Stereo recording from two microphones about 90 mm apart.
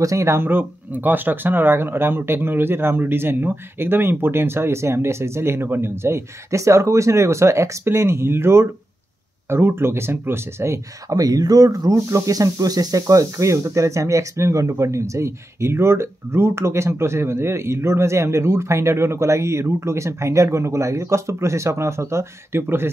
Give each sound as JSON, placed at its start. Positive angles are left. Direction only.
{"t": 0.0, "sound": "speech", "side_deg": -35}